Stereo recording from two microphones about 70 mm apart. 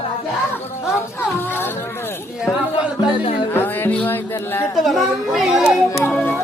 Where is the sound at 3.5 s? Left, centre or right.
Left.